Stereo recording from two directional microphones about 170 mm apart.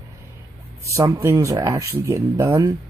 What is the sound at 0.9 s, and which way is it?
Speech, 15° right (ahead or behind).